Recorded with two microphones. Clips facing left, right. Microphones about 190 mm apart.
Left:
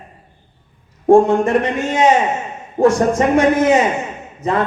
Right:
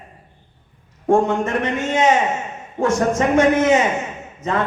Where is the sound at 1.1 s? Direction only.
35° left (ahead or behind).